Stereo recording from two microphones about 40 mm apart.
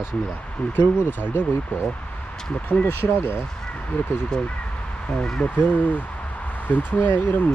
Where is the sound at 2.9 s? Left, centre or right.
Left.